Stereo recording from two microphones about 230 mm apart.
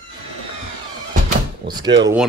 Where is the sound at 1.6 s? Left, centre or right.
Centre.